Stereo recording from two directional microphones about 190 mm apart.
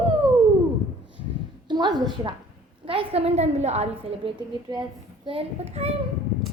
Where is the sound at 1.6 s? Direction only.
20° right (ahead or behind).